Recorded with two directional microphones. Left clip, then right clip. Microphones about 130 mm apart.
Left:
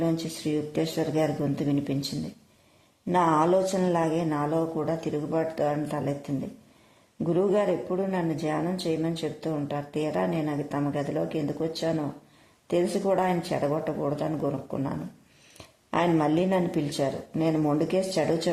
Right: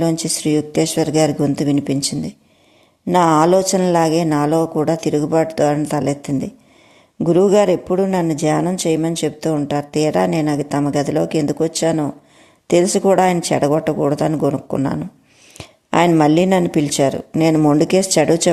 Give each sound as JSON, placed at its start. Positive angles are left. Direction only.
{"t": 0.0, "sound": "a man's voice", "side_deg": -45}
{"t": 3.1, "sound": "a man's voice", "side_deg": -40}
{"t": 15.5, "sound": "a man's voice", "side_deg": -45}